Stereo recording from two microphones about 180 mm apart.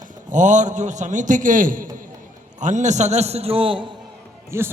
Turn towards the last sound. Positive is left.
turn(degrees=-15)  # may be behind; listen again after turning